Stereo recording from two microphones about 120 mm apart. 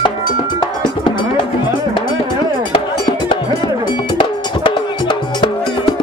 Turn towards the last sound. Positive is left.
turn(degrees=45)  # may be behind; listen again after turning